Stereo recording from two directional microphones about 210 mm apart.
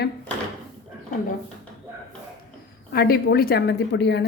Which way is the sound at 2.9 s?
45° left (ahead or behind).